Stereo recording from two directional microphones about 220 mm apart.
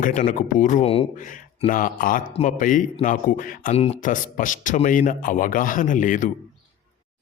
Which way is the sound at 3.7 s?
30° left (ahead or behind).